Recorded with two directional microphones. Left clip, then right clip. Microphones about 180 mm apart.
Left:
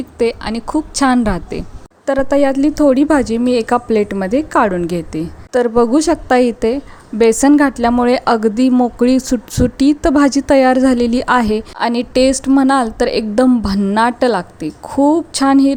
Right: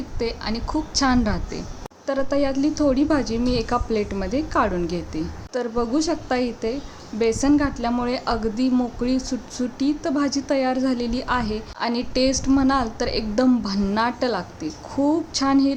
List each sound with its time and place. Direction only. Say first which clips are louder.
0.2 s a woman's voice: left 10 dB; 40° left (ahead or behind)